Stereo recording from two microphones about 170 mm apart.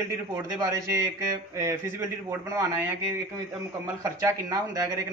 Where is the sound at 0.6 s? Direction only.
20° right (ahead or behind).